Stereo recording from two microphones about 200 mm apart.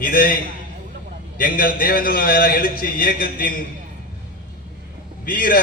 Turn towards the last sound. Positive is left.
turn(degrees=45)  # may be behind; listen again after turning